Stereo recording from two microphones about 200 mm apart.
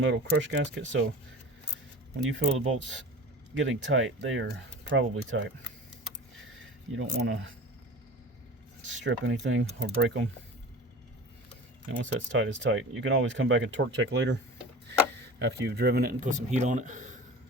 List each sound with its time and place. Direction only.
0.0 s speech: 70° right (ahead or behind)
2.2 s speech: 75° right (ahead or behind)
4.4 s speech: 65° right (ahead or behind)
6.9 s speech: 65° right (ahead or behind)
8.9 s speech: 70° right (ahead or behind)
11.9 s speech: 70° right (ahead or behind)
15.4 s speech: 55° right (ahead or behind); by 17.2 s 40° right (ahead or behind)